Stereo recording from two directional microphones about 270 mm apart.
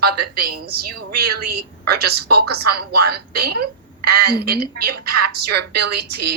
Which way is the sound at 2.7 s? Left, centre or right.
Right.